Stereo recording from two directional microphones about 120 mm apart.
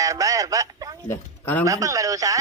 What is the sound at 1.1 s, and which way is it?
Speech, 15° left (ahead or behind).